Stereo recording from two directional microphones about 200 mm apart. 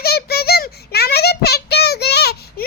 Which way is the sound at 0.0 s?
50° left (ahead or behind).